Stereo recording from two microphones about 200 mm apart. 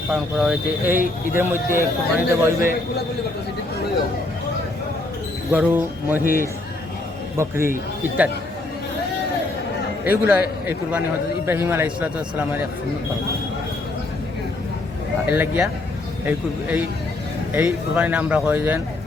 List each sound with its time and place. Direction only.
0.1 s speech: 5° right (ahead or behind)
5.5 s speech: 10° right (ahead or behind)
7.3 s speech: 15° right (ahead or behind)
10.1 s speech: 10° right (ahead or behind)
15.4 s speech: 10° right (ahead or behind)